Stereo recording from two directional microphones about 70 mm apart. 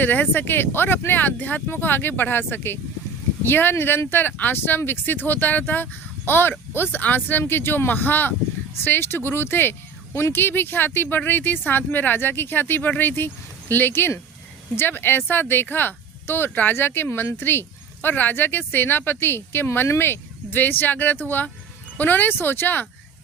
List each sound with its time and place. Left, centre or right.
0.0 s speech: left